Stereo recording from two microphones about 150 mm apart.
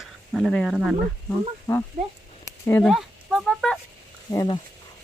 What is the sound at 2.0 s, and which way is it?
Speech, 45° right (ahead or behind).